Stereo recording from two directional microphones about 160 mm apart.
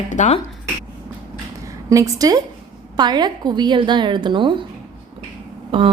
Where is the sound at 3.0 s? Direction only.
25° right (ahead or behind).